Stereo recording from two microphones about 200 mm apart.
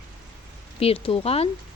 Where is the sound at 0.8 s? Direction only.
30° left (ahead or behind).